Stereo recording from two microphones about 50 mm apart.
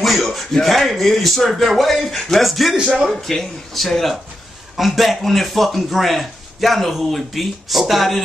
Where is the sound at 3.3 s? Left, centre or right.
Centre.